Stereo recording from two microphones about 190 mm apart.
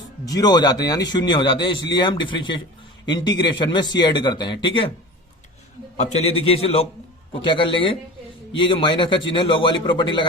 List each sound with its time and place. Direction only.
0.3 s speech: 20° left (ahead or behind)
6.0 s a man's voice: 35° left (ahead or behind)